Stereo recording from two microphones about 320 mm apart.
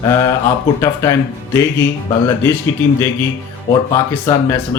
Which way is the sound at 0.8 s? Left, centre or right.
Centre.